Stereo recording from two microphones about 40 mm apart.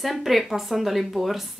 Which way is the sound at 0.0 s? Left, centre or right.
Centre.